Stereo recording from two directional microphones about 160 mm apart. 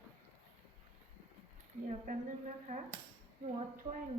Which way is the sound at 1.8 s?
50° right (ahead or behind).